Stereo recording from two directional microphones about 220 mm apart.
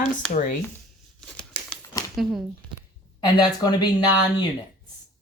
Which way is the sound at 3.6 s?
20° left (ahead or behind).